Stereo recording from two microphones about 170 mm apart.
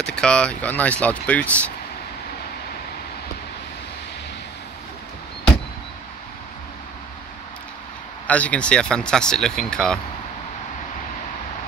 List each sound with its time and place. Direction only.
0.0 s speech: 5° left (ahead or behind)
8.3 s speech: 10° left (ahead or behind)